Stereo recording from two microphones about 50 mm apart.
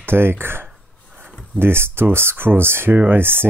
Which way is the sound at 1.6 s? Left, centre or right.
Right.